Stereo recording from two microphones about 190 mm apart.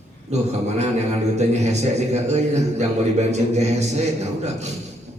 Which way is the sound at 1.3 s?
35° right (ahead or behind).